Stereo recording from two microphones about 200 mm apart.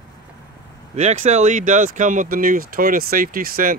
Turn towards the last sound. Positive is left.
turn(degrees=-45)  # may be behind; listen again after turning